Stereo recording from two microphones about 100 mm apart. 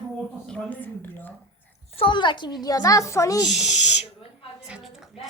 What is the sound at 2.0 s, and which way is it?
A woman's voice, 55° left (ahead or behind).